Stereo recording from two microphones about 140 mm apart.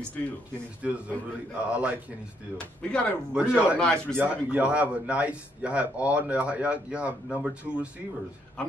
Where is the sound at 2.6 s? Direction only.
10° left (ahead or behind).